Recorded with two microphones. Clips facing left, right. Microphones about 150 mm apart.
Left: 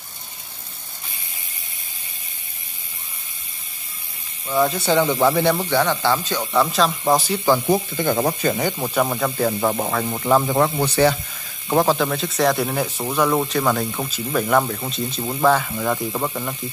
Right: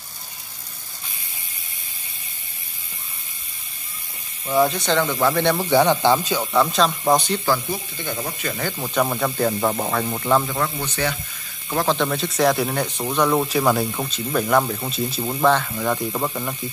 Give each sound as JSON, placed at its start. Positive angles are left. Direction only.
{"t": 4.6, "sound": "speech", "side_deg": 5}
{"t": 5.7, "sound": "speech", "side_deg": -15}
{"t": 6.4, "sound": "speech", "side_deg": 0}
{"t": 7.6, "sound": "speech", "side_deg": 50}
{"t": 8.5, "sound": "speech", "side_deg": 20}
{"t": 8.9, "sound": "speech", "side_deg": 0}
{"t": 10.5, "sound": "speech", "side_deg": 35}
{"t": 11.7, "sound": "speech", "side_deg": 15}
{"t": 12.0, "sound": "speech", "side_deg": 0}